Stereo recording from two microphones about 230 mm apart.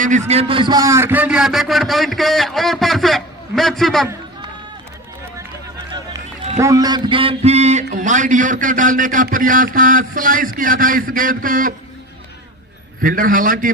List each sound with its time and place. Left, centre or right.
0.0 s a man's voice: right; by 4.1 s centre
6.6 s music: centre
7.9 s a man's voice: right
13.0 s a man's voice: right